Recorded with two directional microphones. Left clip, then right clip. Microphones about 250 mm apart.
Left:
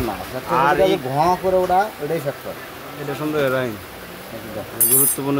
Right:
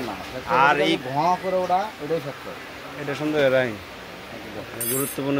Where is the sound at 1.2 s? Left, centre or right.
Left.